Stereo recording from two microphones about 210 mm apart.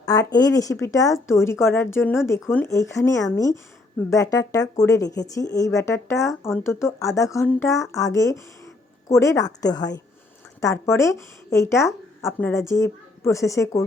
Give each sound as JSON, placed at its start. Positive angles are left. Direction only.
{"t": 0.0, "sound": "a woman's voice", "side_deg": 15}